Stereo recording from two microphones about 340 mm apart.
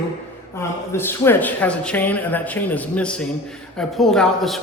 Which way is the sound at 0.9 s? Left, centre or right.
Centre.